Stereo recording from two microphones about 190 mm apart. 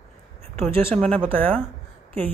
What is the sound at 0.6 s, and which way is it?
Speech, 10° left (ahead or behind).